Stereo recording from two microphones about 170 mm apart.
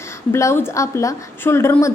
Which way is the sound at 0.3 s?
15° left (ahead or behind).